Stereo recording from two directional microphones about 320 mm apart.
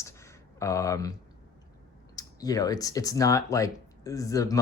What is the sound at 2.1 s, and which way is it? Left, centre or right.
Speech, centre.